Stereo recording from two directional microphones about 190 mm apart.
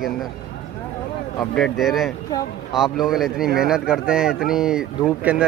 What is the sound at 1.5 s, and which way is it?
Speech, centre (ahead or behind).